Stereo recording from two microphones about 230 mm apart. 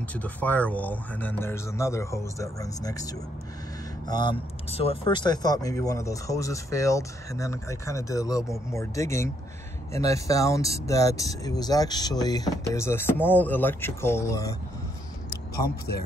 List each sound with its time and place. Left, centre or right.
0.1 s speech: centre
15.6 s speech: left